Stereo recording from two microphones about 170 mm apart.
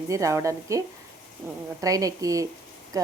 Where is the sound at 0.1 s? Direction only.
20° right (ahead or behind).